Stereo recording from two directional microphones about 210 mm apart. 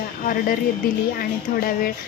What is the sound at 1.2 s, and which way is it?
Speech, 45° left (ahead or behind).